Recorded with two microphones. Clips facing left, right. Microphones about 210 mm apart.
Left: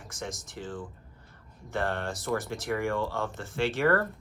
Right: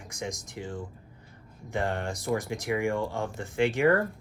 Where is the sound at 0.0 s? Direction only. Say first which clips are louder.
Right 2 dB; 15° right (ahead or behind).